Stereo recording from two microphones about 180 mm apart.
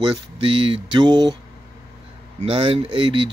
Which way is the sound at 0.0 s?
30° right (ahead or behind).